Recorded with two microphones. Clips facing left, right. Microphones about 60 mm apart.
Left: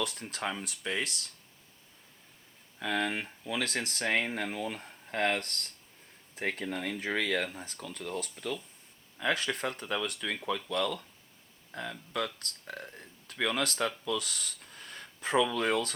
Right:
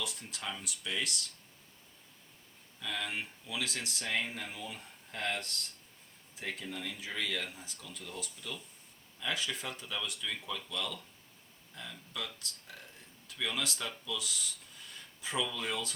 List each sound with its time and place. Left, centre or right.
0.0 s speech: left
2.7 s speech: left